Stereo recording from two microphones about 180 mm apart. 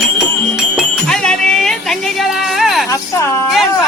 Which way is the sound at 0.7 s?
5° left (ahead or behind).